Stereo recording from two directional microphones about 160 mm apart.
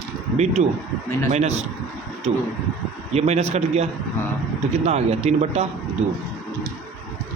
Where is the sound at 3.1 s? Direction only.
45° right (ahead or behind).